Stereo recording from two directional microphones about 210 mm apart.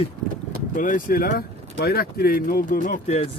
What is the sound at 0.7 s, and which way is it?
Speech, 40° left (ahead or behind).